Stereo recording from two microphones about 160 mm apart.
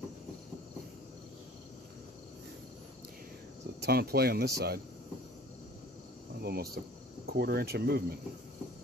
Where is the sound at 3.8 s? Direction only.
80° right.